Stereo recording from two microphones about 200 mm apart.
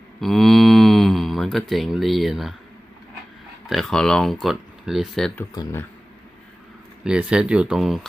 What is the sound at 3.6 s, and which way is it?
Speech, centre (ahead or behind).